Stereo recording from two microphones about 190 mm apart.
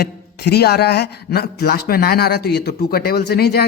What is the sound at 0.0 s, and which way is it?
Speech, 55° left (ahead or behind).